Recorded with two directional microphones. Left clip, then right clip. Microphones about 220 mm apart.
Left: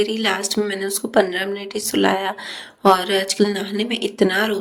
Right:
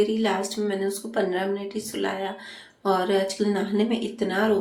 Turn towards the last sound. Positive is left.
turn(degrees=50)  # may be behind; listen again after turning